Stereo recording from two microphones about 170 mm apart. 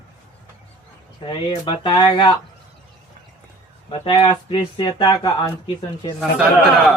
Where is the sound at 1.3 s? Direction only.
30° left (ahead or behind).